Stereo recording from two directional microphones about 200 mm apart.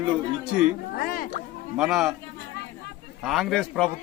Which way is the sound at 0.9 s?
45° left (ahead or behind).